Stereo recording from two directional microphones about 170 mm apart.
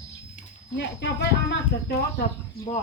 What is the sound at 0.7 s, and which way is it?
Speech, 90° left.